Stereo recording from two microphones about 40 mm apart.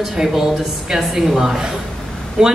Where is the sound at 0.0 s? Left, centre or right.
Centre.